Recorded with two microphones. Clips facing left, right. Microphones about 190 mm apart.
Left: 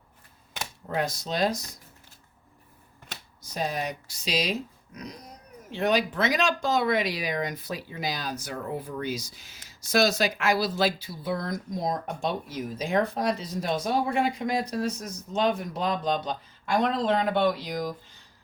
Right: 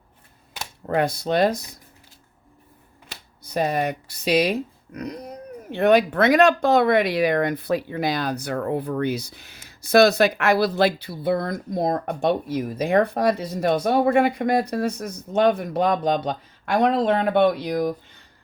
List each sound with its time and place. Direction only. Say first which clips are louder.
0.9 s speech: right 8 dB; 60° right (ahead or behind)
3.4 s speech: right 7 dB; 60° right (ahead or behind)